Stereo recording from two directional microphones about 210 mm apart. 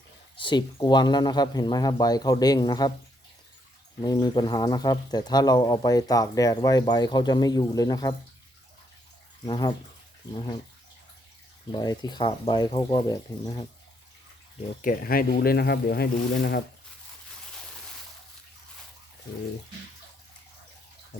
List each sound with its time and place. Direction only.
0.3 s speech: 20° left (ahead or behind)
4.0 s speech: 20° left (ahead or behind)
9.5 s speech: 20° left (ahead or behind)
11.7 s speech: 20° left (ahead or behind)
14.7 s speech: 40° left (ahead or behind)